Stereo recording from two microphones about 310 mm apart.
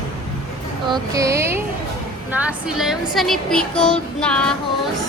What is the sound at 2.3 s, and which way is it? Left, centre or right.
Child singing, centre.